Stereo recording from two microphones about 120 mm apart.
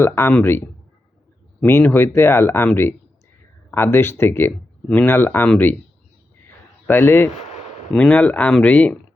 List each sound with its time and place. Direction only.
0.0 s speech: 20° left (ahead or behind)
1.6 s speech: 20° left (ahead or behind)
6.8 s speech: 15° left (ahead or behind)